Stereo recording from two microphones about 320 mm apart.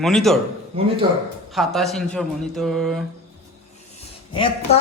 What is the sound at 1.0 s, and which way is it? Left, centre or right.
Speech, centre.